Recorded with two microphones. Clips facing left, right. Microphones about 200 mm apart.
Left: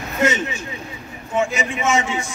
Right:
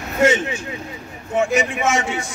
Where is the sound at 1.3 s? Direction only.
60° right (ahead or behind).